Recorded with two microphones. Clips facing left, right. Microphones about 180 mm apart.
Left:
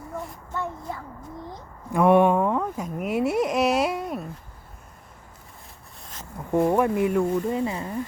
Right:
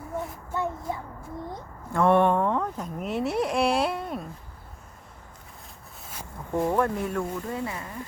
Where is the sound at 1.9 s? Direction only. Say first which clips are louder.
Left 3 dB; 10° left (ahead or behind).